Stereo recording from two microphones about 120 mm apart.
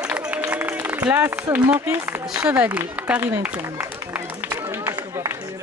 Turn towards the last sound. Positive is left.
turn(degrees=-20)  # may be behind; listen again after turning